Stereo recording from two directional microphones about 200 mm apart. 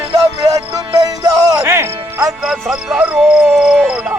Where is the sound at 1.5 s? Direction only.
15° right (ahead or behind).